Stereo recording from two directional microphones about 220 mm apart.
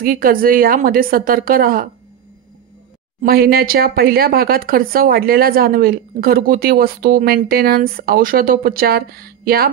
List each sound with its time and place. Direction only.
0.0 s a woman's voice: 40° right (ahead or behind)
3.2 s speech: 45° right (ahead or behind)